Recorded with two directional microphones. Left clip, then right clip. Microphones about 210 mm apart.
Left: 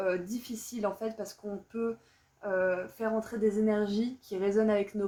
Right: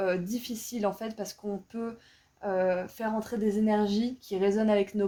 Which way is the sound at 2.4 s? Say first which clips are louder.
Right 2 dB; 50° right (ahead or behind).